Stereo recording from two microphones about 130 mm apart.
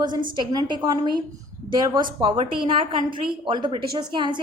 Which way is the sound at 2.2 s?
40° right (ahead or behind).